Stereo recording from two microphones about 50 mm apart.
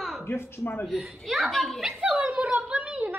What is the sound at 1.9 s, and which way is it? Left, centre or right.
A woman's voice, right.